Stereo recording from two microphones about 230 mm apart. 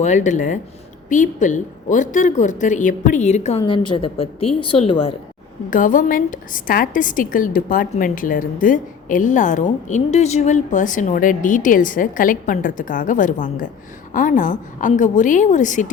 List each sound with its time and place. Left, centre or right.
0.0 s a woman's voice: left
5.7 s a woman's voice: left